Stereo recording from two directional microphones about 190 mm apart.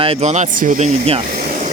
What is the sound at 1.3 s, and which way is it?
Vehicle, 45° right (ahead or behind).